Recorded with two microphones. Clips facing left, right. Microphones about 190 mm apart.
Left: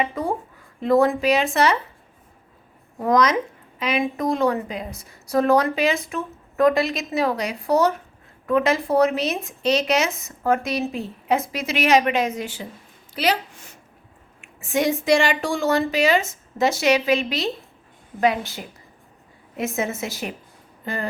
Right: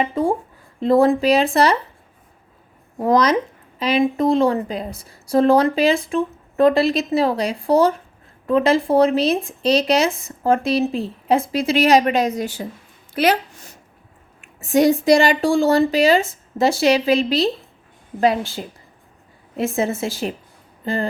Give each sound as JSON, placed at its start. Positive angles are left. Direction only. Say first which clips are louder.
{"t": 0.0, "sound": "a woman's voice", "louder": "right 5 dB", "side_deg": -30}
{"t": 3.0, "sound": "a woman's voice", "louder": "right 3 dB", "side_deg": -30}
{"t": 13.1, "sound": "speech", "louder": "right 5 dB", "side_deg": -50}